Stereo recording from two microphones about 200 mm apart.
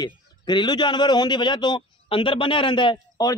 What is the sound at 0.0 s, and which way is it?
A man's voice, 20° left (ahead or behind).